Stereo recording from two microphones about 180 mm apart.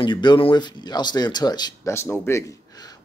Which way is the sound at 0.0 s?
25° left (ahead or behind).